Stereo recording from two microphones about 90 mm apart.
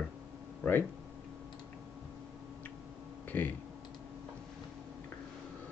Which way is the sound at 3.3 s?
20° left (ahead or behind).